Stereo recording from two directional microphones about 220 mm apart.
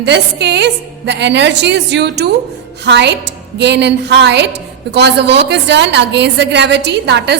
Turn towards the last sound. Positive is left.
turn(degrees=-50)  # may be behind; listen again after turning